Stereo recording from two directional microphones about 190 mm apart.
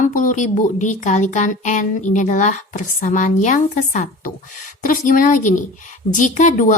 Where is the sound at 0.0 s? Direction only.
45° left (ahead or behind).